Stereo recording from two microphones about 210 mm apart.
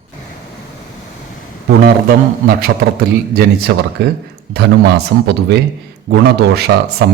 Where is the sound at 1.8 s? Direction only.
45° right (ahead or behind).